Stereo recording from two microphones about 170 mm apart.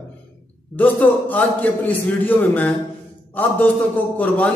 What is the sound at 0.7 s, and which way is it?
A man's voice, 10° left (ahead or behind).